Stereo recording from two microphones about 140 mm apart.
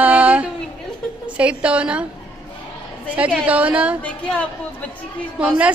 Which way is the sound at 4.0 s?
10° left (ahead or behind).